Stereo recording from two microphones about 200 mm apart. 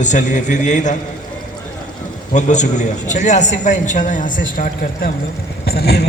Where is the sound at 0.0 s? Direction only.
40° left (ahead or behind).